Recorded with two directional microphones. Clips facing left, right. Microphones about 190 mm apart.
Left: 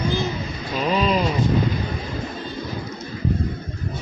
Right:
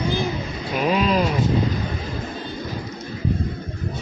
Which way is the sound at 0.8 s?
5° right (ahead or behind).